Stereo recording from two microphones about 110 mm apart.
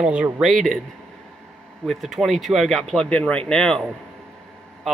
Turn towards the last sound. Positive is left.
turn(degrees=10)  # may be behind; listen again after turning